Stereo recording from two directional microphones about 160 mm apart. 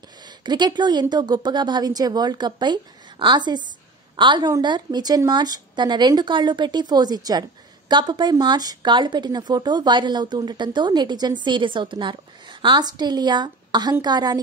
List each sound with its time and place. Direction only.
0.2 s a woman's voice: 30° right (ahead or behind)